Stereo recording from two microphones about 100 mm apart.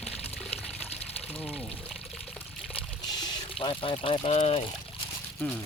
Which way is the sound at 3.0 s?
45° left (ahead or behind).